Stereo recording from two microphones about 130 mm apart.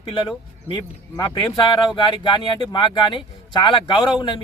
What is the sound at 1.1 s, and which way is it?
Speech, 30° left (ahead or behind).